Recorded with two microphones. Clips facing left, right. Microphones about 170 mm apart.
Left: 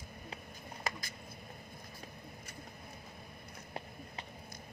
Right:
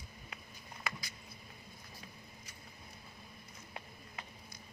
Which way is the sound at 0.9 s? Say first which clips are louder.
Left 3 dB; 40° left (ahead or behind).